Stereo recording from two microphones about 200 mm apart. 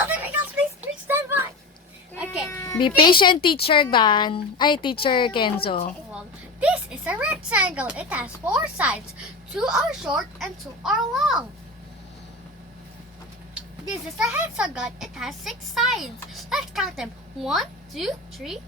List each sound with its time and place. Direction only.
0.1 s a sound: 10° right (ahead or behind)
2.1 s baby cry: 5° right (ahead or behind)
2.6 s a woman's voice: 20° left (ahead or behind)
6.6 s speech: 5° right (ahead or behind)
14.2 s speech: 5° right (ahead or behind)